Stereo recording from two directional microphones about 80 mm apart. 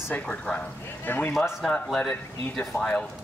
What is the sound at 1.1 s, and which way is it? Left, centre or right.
Speech, left.